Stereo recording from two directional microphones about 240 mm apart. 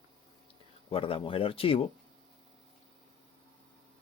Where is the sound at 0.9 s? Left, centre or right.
Left.